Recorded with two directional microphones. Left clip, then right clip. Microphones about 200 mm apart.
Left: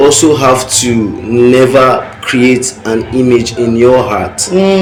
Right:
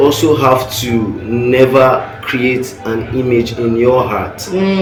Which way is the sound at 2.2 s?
50° left (ahead or behind).